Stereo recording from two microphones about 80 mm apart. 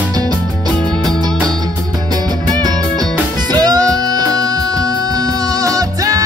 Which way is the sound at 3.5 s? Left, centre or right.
Right.